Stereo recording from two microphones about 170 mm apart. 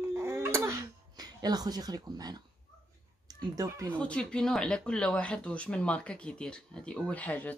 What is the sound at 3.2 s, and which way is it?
Speech, 20° right (ahead or behind).